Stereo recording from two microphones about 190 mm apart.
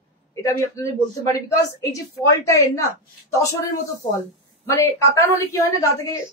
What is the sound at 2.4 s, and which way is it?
Speech, 15° left (ahead or behind).